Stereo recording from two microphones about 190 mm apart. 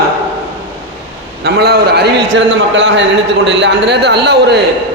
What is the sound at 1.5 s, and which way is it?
A man's voice, 60° right (ahead or behind).